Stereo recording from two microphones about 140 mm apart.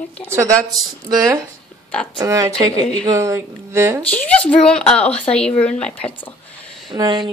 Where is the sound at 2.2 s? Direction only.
25° right (ahead or behind).